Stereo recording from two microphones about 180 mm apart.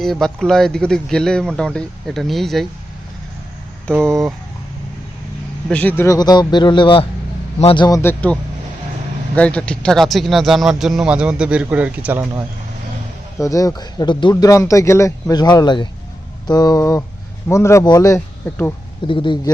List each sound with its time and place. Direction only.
0.0 s a man's voice: centre (ahead or behind)
3.9 s speech: 15° right (ahead or behind)
5.6 s speech: 10° left (ahead or behind)
9.3 s a man's voice: 5° left (ahead or behind)
13.4 s speech: 20° left (ahead or behind)
19.0 s speech: 25° left (ahead or behind)